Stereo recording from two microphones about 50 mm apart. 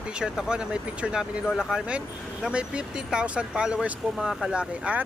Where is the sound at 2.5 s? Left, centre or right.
Right.